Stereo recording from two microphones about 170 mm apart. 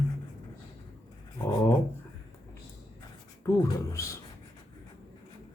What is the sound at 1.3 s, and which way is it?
Speech, 20° left (ahead or behind).